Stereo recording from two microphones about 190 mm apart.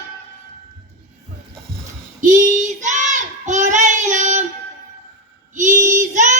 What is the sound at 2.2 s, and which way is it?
Child singing, 40° right (ahead or behind).